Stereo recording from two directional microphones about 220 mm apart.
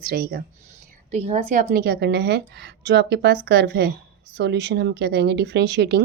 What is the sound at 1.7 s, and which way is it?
Speech, 45° right (ahead or behind).